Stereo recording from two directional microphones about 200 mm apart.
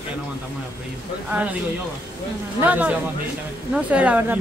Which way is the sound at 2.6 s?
10° right (ahead or behind).